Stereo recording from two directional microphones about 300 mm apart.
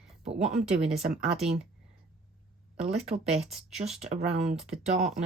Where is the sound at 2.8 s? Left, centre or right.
Right.